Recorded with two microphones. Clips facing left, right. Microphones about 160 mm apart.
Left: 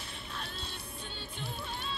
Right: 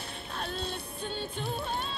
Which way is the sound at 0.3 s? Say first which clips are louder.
Right 9 dB; 50° right (ahead or behind).